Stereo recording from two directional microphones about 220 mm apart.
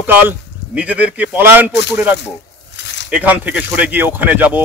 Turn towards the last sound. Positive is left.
turn(degrees=-10)  # may be behind; listen again after turning